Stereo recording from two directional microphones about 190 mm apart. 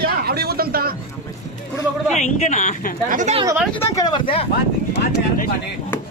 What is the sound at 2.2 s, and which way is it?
Speech, 35° left (ahead or behind).